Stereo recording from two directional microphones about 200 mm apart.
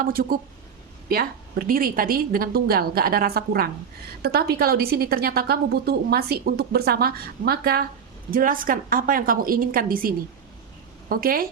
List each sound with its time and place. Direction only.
0.0 s a woman's voice: 45° right (ahead or behind)